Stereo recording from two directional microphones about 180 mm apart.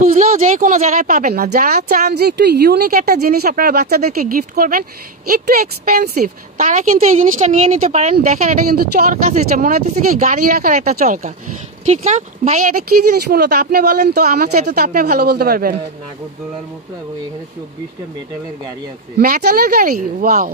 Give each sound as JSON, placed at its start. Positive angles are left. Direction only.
{"t": 0.0, "sound": "speech", "side_deg": -50}
{"t": 8.7, "sound": "speech", "side_deg": -55}
{"t": 11.8, "sound": "speech", "side_deg": -40}
{"t": 13.1, "sound": "speech", "side_deg": -60}
{"t": 19.1, "sound": "speech", "side_deg": -55}